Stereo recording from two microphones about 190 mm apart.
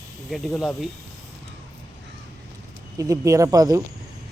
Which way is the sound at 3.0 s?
15° right (ahead or behind).